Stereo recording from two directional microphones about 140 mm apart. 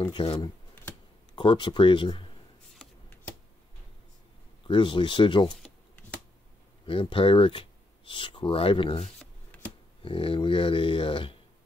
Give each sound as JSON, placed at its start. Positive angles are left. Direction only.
{"t": 0.2, "sound": "speech", "side_deg": 40}
{"t": 4.6, "sound": "speech", "side_deg": 35}
{"t": 5.6, "sound": "shuffling cards", "side_deg": 5}
{"t": 6.9, "sound": "speech", "side_deg": 40}
{"t": 9.5, "sound": "a sound", "side_deg": 10}
{"t": 10.0, "sound": "speech", "side_deg": 40}